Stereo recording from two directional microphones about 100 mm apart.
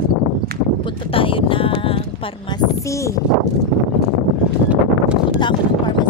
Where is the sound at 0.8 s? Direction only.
65° left (ahead or behind).